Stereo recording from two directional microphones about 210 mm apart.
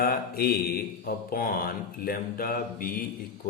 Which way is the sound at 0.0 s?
45° left (ahead or behind).